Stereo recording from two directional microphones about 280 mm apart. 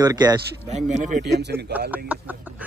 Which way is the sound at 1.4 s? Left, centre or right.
Right.